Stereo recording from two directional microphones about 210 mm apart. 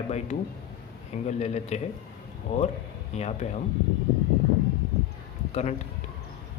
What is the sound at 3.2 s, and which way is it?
Speech, 30° left (ahead or behind).